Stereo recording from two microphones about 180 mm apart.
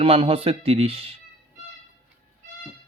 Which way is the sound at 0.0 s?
30° right (ahead or behind).